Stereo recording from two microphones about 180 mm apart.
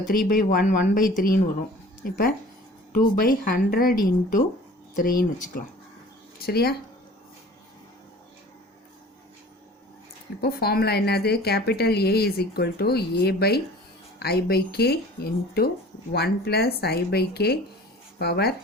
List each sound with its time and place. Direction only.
0.1 s speech: 50° left (ahead or behind)
6.4 s a woman's voice: 60° left (ahead or behind)
10.4 s a woman's voice: 60° left (ahead or behind)